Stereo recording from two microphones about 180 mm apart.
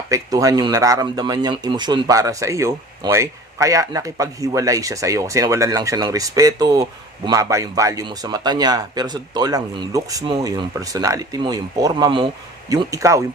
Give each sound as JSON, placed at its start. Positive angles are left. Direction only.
{"t": 0.1, "sound": "speech", "side_deg": -20}